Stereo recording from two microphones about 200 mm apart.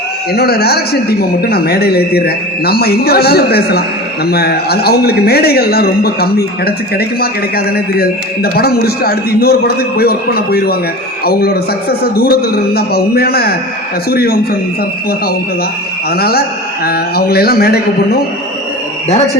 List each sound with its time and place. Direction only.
0.3 s a man's voice: 55° left (ahead or behind)
16.0 s a man's voice: 50° left (ahead or behind)